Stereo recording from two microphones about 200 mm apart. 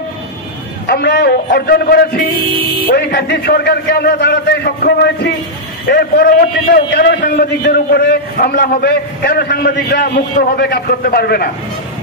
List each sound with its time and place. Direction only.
0.8 s a man's voice: 55° left (ahead or behind)